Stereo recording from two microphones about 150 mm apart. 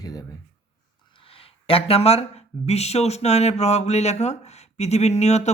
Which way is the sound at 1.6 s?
40° left (ahead or behind).